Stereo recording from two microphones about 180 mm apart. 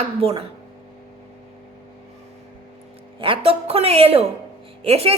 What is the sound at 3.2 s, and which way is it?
A woman's voice, 30° right (ahead or behind).